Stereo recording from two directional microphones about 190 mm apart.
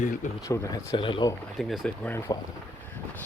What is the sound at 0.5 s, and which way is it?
Speech, 15° left (ahead or behind).